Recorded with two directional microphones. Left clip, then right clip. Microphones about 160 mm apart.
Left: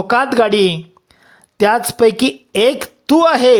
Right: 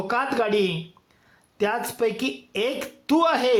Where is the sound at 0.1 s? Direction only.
40° left (ahead or behind).